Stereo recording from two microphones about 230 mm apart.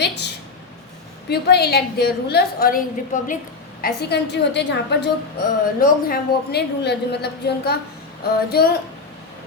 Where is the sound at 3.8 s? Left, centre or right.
Left.